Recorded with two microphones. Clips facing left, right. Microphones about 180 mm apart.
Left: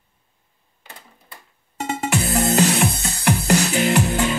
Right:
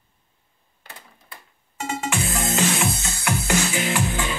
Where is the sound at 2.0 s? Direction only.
40° left (ahead or behind).